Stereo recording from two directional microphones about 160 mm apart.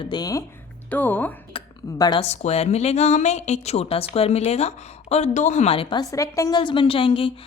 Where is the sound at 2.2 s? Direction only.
40° left (ahead or behind).